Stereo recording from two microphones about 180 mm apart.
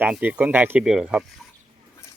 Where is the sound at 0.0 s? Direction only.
10° right (ahead or behind).